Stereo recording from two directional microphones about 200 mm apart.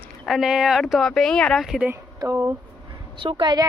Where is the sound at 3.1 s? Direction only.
25° right (ahead or behind).